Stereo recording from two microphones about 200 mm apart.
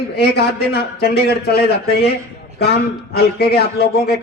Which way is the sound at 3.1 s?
55° left (ahead or behind).